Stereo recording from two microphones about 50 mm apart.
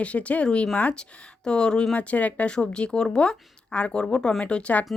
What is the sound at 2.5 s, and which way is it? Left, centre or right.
Speech, centre.